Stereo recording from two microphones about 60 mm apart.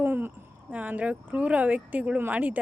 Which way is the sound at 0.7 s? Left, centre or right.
Right.